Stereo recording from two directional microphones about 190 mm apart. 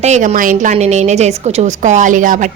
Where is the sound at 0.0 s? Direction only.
35° right (ahead or behind).